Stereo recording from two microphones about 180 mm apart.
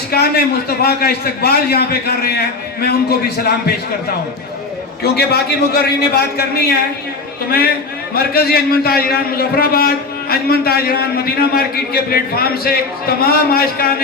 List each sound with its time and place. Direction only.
0.1 s a man's voice: 60° left (ahead or behind)
5.0 s a man's voice: 65° left (ahead or behind)
8.1 s a man's voice: 55° left (ahead or behind)